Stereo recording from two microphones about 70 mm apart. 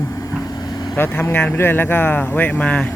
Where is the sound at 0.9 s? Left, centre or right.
Left.